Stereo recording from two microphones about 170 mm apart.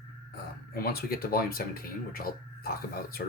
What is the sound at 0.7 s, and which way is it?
Speech, 65° left (ahead or behind).